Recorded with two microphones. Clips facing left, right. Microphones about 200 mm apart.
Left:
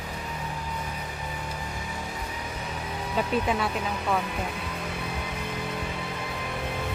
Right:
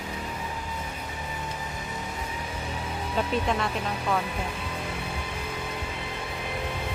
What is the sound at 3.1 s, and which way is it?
Speech, 5° left (ahead or behind).